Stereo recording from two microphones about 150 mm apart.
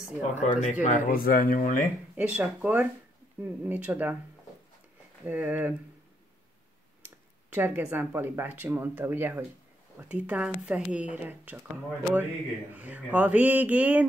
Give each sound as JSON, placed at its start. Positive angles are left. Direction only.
{"t": 0.4, "sound": "speech", "side_deg": 50}
{"t": 0.8, "sound": "speech", "side_deg": 70}
{"t": 2.1, "sound": "speech", "side_deg": -10}
{"t": 5.2, "sound": "speech", "side_deg": -10}
{"t": 7.4, "sound": "speech", "side_deg": -10}